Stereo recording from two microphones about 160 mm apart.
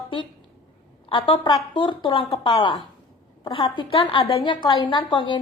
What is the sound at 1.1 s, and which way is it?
A woman's voice, 30° left (ahead or behind).